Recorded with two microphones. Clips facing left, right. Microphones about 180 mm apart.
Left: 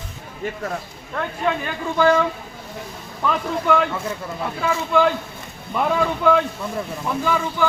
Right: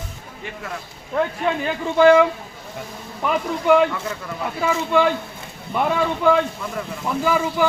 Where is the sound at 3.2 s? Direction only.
10° right (ahead or behind).